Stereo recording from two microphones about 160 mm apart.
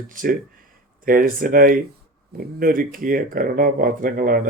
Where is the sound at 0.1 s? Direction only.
60° right (ahead or behind).